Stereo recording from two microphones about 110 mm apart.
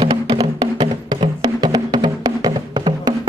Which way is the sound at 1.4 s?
40° right (ahead or behind).